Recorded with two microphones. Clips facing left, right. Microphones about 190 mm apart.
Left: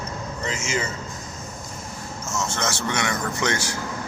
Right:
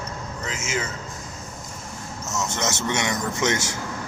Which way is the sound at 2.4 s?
20° right (ahead or behind).